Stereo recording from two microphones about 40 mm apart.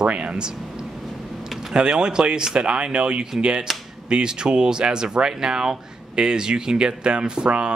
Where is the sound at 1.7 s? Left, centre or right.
Right.